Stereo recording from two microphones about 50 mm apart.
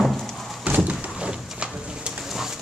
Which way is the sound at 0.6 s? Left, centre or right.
Right.